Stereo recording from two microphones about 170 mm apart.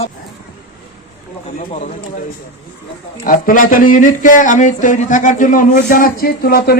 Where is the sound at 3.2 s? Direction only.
50° left (ahead or behind).